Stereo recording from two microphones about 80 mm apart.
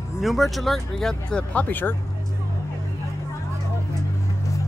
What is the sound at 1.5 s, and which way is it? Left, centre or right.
Speech, left.